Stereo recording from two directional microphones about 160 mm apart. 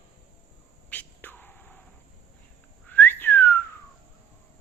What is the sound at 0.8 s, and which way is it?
Whispering, 10° left (ahead or behind).